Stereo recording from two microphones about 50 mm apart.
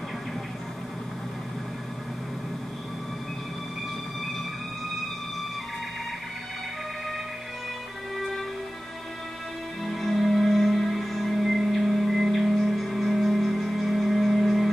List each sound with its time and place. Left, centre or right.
8.2 s music: centre
9.8 s music: centre